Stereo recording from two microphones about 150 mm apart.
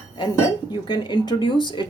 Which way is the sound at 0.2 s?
35° left (ahead or behind).